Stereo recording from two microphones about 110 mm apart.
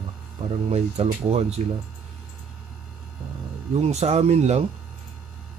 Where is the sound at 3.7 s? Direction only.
75° right (ahead or behind).